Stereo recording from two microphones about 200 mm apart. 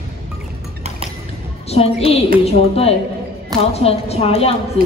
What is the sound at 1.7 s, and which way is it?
A woman's voice, 30° left (ahead or behind).